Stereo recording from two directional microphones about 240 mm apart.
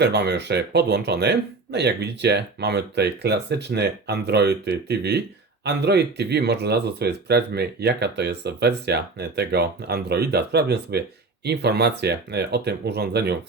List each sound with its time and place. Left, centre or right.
0.0 s speech: right